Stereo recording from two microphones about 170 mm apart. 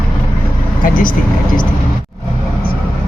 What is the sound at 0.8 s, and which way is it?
Speech, 55° left (ahead or behind).